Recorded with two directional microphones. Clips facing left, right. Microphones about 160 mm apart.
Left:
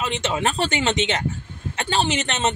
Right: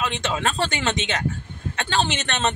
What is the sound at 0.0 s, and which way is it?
Speech, 20° left (ahead or behind).